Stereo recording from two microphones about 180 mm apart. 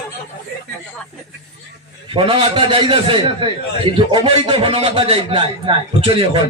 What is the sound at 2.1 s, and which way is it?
A man's voice, 30° right (ahead or behind).